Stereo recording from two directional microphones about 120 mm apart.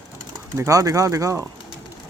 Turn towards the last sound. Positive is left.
turn(degrees=-25)  # may be behind; listen again after turning